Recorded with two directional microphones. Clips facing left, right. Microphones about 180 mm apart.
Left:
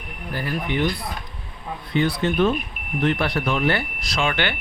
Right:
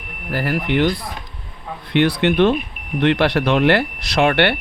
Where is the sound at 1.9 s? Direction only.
75° right (ahead or behind).